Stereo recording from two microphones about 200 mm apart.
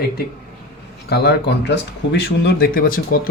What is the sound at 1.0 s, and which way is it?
Speech, 55° left (ahead or behind).